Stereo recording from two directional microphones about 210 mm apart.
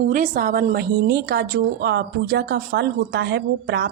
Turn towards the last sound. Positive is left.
turn(degrees=-55)  # may be behind; listen again after turning